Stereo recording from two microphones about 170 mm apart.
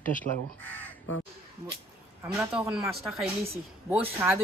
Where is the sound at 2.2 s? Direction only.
5° right (ahead or behind).